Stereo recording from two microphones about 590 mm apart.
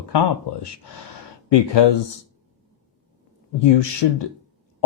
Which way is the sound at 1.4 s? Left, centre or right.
Left.